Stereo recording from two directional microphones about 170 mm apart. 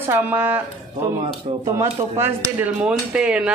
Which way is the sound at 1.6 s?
15° right (ahead or behind).